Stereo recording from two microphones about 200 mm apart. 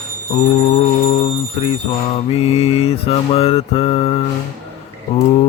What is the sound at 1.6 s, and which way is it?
Mantra, 25° left (ahead or behind).